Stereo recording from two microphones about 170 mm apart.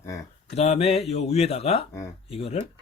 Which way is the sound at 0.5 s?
40° left (ahead or behind).